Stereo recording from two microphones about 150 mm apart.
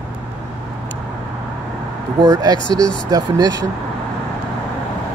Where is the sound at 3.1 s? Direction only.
25° right (ahead or behind).